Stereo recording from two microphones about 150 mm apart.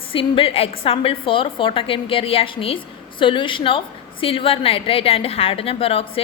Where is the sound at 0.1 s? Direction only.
35° left (ahead or behind).